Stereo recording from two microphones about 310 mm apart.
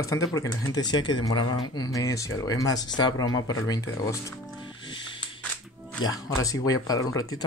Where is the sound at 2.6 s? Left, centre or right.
Left.